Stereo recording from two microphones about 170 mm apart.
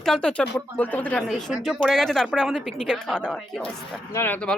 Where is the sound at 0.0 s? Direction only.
5° left (ahead or behind).